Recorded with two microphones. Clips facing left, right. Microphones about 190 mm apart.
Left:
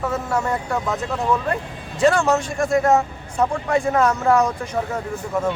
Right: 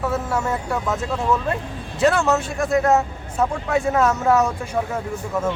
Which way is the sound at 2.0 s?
5° right (ahead or behind).